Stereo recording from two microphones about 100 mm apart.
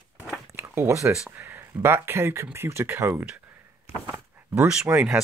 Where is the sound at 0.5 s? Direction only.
25° right (ahead or behind).